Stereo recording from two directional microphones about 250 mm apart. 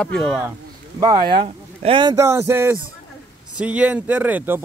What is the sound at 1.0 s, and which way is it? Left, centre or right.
Speech, right.